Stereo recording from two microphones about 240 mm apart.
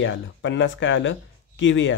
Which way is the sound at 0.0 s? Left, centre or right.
Left.